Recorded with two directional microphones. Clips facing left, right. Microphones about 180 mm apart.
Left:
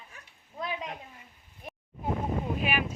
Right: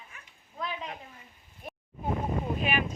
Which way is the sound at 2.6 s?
10° left (ahead or behind).